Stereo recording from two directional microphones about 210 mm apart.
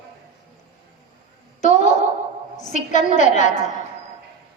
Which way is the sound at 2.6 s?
35° left (ahead or behind).